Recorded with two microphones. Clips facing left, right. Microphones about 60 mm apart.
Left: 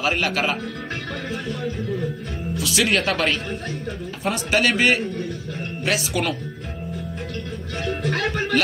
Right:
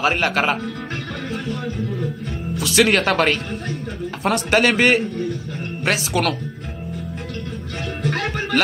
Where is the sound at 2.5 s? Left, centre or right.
Right.